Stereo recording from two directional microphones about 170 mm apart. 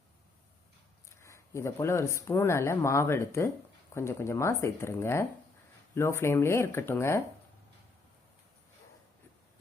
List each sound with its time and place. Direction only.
1.1 s speech: 15° left (ahead or behind)